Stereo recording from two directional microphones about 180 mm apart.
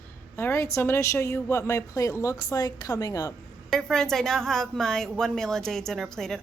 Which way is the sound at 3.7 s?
5° left (ahead or behind).